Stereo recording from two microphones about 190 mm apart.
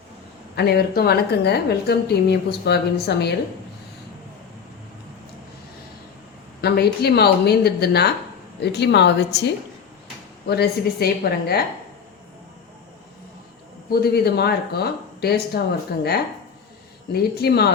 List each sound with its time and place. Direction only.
0.5 s a woman's voice: 60° left (ahead or behind)
6.6 s a woman's voice: 55° left (ahead or behind)
13.9 s a woman's voice: 55° left (ahead or behind)
17.1 s a woman's voice: 55° left (ahead or behind)